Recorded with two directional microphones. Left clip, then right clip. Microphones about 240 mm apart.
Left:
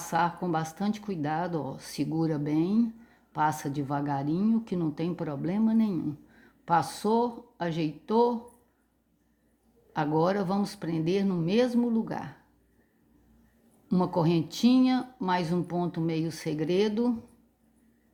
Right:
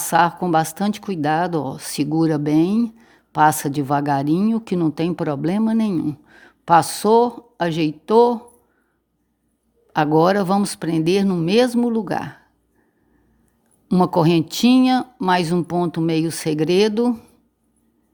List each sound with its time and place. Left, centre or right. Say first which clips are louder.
0.0 s speech: right 11 dB; right
9.9 s speech: right 11 dB; right
13.8 s speech: right 10 dB; right